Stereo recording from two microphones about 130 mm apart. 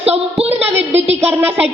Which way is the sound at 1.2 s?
15° right (ahead or behind).